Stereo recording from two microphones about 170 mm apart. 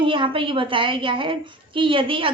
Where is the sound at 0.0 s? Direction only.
30° right (ahead or behind).